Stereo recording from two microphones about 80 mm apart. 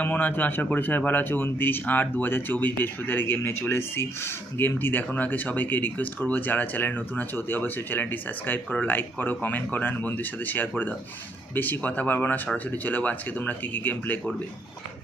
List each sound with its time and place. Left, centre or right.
0.0 s speech: left